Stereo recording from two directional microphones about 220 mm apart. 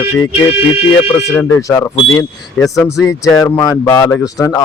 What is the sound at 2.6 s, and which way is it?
Speech, centre (ahead or behind).